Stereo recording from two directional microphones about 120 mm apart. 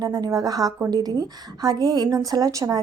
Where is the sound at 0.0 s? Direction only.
30° right (ahead or behind).